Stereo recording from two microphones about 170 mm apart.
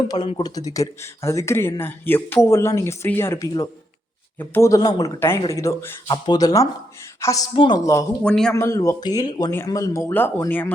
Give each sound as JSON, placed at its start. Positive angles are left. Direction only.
{"t": 0.1, "sound": "speech", "side_deg": 30}
{"t": 7.5, "sound": "speech", "side_deg": 30}
{"t": 8.2, "sound": "a man's voice", "side_deg": 5}
{"t": 8.5, "sound": "speech", "side_deg": 15}